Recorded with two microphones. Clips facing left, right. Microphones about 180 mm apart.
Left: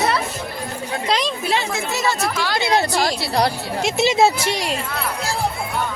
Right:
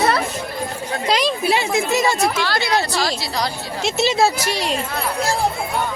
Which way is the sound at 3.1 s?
60° left (ahead or behind).